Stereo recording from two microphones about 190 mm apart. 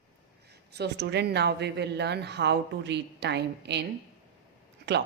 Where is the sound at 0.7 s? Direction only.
60° right (ahead or behind).